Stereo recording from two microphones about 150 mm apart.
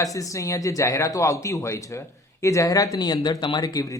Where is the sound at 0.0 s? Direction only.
20° left (ahead or behind).